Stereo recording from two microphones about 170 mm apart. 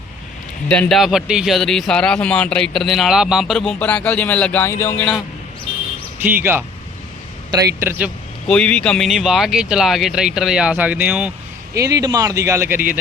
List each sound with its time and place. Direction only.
0.7 s speech: 5° left (ahead or behind)
6.2 s a man's voice: 10° right (ahead or behind)
8.4 s speech: 5° left (ahead or behind)
11.7 s speech: 20° right (ahead or behind)